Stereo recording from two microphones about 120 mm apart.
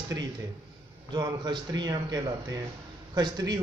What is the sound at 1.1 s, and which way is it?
A man's voice, 35° right (ahead or behind).